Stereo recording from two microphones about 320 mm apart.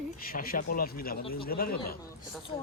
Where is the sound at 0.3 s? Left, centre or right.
Left.